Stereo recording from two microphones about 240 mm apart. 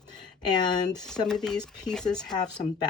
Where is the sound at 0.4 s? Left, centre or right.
Centre.